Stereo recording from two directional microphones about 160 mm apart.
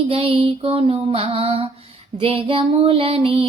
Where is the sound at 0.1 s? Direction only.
35° right (ahead or behind).